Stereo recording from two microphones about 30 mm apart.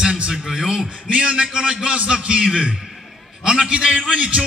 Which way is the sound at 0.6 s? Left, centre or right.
Right.